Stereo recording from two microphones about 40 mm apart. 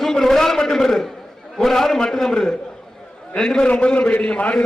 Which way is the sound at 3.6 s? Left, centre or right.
Left.